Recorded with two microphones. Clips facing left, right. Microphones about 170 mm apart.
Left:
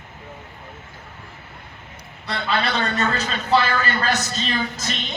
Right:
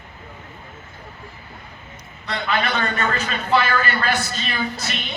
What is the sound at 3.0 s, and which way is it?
A man's voice, 40° left (ahead or behind).